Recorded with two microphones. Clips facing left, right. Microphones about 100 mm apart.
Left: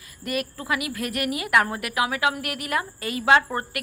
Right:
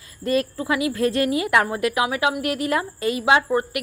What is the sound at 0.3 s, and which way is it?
Speech, 25° right (ahead or behind).